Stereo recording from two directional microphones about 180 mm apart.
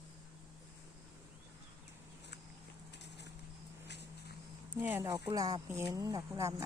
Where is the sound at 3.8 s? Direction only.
70° left (ahead or behind).